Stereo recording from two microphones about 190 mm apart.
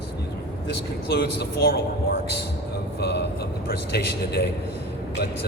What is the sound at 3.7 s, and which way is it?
Speech, 60° left (ahead or behind).